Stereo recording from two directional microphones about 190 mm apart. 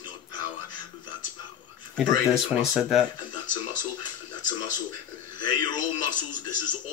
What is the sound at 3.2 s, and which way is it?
Speech, 20° left (ahead or behind).